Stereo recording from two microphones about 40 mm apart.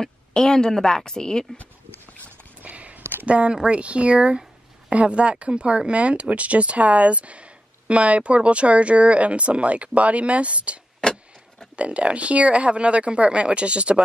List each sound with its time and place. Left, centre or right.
0.0 s a woman's voice: centre
2.6 s a sound: right
3.3 s speech: right
11.0 s vehicle: left
11.7 s speech: right